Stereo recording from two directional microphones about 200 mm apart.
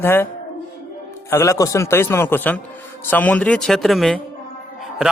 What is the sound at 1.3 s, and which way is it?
Speech, 15° left (ahead or behind).